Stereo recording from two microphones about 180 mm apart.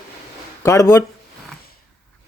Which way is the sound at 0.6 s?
20° left (ahead or behind).